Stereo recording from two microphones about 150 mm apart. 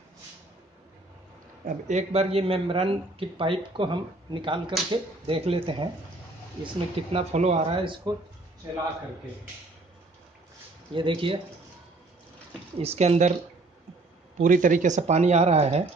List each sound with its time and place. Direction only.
1.9 s speech: 45° right (ahead or behind)
7.1 s speech: 45° right (ahead or behind)
8.1 s speech: 25° right (ahead or behind)
10.9 s speech: 35° right (ahead or behind)
12.7 s speech: 40° right (ahead or behind)
14.4 s speech: 60° right (ahead or behind); by 15.9 s 45° right (ahead or behind)